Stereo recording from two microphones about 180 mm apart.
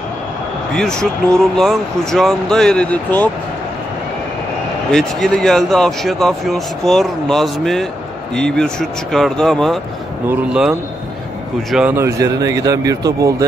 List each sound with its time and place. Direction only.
0.7 s speech: 5° left (ahead or behind)
4.9 s speech: 5° left (ahead or behind); by 13.5 s 20° right (ahead or behind)